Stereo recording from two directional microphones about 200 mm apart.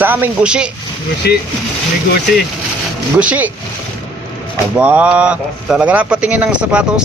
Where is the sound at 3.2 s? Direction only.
5° right (ahead or behind).